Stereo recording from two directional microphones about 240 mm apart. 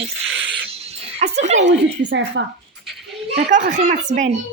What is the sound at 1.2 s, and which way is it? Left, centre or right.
Speech, right.